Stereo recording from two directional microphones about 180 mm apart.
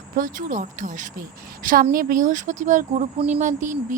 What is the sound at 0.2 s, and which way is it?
Speech, 50° right (ahead or behind).